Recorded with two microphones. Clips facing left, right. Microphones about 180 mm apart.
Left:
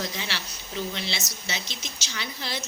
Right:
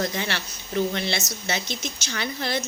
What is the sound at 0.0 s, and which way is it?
A woman's voice, 55° right (ahead or behind).